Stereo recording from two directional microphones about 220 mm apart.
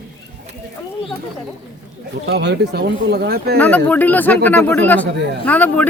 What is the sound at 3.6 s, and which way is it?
Speech, 5° left (ahead or behind).